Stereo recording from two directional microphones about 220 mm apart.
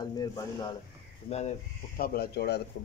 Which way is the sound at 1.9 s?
45° left (ahead or behind).